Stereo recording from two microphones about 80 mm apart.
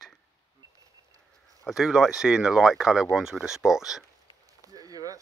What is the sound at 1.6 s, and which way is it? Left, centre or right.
Speech, centre.